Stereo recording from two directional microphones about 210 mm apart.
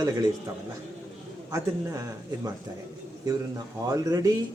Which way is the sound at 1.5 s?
15° right (ahead or behind).